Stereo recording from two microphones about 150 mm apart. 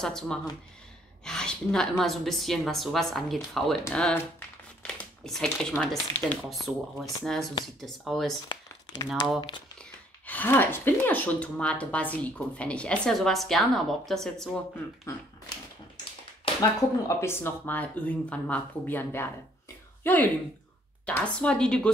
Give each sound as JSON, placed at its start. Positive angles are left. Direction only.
{"t": 0.0, "sound": "speech", "side_deg": 5}
{"t": 6.6, "sound": "speech", "side_deg": 25}
{"t": 7.2, "sound": "speech", "side_deg": 0}
{"t": 8.5, "sound": "crumpling", "side_deg": 30}
{"t": 9.8, "sound": "speech", "side_deg": 10}
{"t": 17.1, "sound": "speech", "side_deg": 15}